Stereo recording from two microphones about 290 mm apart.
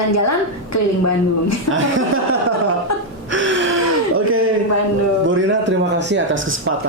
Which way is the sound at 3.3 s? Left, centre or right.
Right.